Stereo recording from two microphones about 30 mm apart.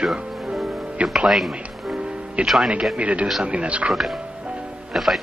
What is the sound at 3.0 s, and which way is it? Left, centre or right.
Speech, right.